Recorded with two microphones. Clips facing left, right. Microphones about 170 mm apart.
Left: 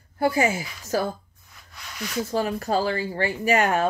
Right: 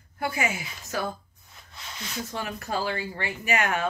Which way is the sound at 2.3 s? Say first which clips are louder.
Left 8 dB; 30° left (ahead or behind).